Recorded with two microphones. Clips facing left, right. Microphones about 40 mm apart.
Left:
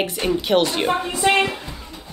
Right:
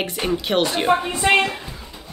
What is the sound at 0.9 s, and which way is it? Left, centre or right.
Speech, right.